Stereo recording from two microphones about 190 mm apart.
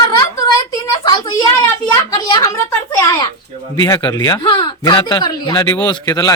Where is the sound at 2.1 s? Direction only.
20° left (ahead or behind).